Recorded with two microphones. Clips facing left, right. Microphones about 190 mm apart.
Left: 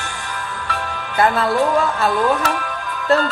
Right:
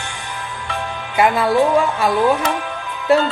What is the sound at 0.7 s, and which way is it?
Speech, 15° right (ahead or behind).